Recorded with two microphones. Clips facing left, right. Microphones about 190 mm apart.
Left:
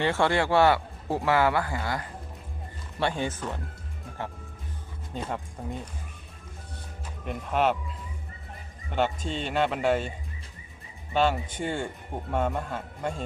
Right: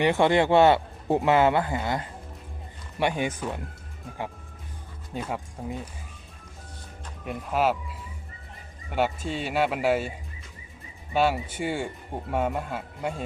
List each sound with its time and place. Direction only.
0.0 s speech: 15° right (ahead or behind)
5.1 s speech: 5° right (ahead or behind)
7.3 s speech: 5° right (ahead or behind)
8.9 s speech: 10° right (ahead or behind)
11.1 s speech: 10° right (ahead or behind)